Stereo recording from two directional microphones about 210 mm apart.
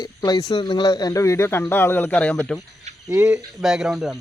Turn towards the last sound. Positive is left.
turn(degrees=0)  # may be behind; listen again after turning